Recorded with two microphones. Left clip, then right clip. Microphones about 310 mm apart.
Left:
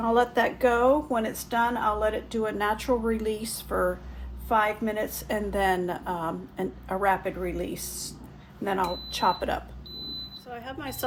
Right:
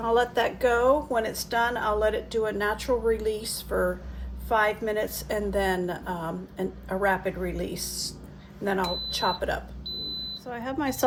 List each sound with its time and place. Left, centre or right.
0.0 s a woman's voice: centre
10.5 s speech: centre